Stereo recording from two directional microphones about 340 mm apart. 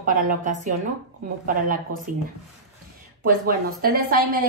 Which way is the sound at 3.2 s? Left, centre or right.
Right.